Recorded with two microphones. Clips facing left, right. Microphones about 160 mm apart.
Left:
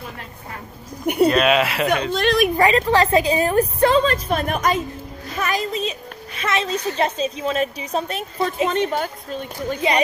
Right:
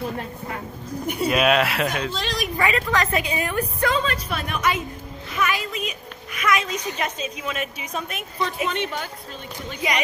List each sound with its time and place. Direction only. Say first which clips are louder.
1.0 s speech: left 9 dB; 60° left (ahead or behind)
1.3 s speech: left 2 dB; centre (ahead or behind)
2.0 s speech: left 9 dB; 55° left (ahead or behind)
2.5 s a woman's voice: left 6 dB; 35° left (ahead or behind)
9.8 s speech: left 6 dB; 30° left (ahead or behind)